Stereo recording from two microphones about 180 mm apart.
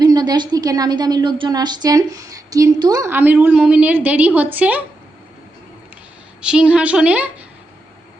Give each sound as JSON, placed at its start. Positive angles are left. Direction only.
{"t": 0.0, "sound": "a woman's voice", "side_deg": -20}
{"t": 6.4, "sound": "a woman's voice", "side_deg": -5}